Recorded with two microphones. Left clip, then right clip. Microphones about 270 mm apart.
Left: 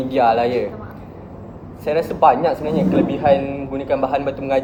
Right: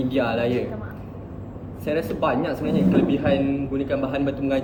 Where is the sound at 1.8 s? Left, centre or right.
Centre.